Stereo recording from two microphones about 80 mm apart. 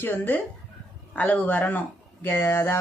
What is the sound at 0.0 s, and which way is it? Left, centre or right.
Speech, left.